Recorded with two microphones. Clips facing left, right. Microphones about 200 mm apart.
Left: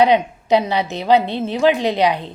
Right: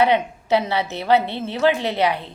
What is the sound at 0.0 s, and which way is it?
A woman's voice, 15° left (ahead or behind).